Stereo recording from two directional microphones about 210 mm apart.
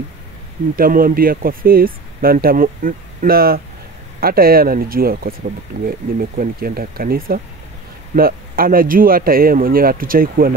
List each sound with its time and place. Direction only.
0.7 s speech: 40° right (ahead or behind)